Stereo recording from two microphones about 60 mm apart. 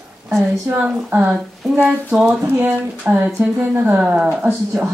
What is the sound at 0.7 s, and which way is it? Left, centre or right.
Speech, right.